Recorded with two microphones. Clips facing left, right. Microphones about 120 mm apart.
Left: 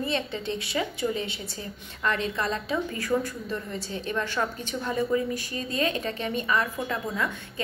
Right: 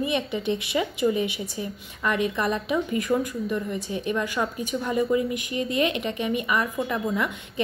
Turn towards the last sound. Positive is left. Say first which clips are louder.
# right 4 dB
turn(degrees=-15)  # may be behind; listen again after turning